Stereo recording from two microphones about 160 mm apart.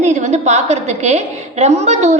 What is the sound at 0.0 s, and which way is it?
A woman's voice, 45° right (ahead or behind).